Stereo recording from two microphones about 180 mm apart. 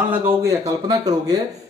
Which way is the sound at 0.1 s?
15° right (ahead or behind).